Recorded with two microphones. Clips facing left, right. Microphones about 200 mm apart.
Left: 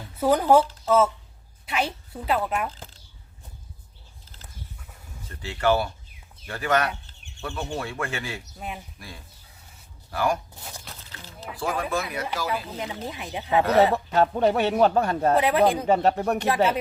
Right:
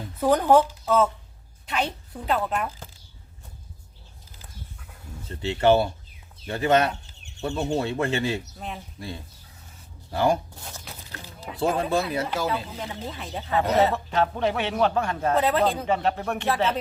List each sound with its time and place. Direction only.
0.2 s a woman's voice: 5° left (ahead or behind)
5.3 s speech: 25° right (ahead or behind)
8.5 s speech: 5° left (ahead or behind)
9.0 s speech: 25° right (ahead or behind)
10.8 s a sound: 15° right (ahead or behind)
11.6 s speech: 25° right (ahead or behind)
12.7 s speech: 10° left (ahead or behind)
13.9 s a man's voice: 40° left (ahead or behind)
15.4 s speech: 10° left (ahead or behind)
15.9 s a man's voice: 40° left (ahead or behind)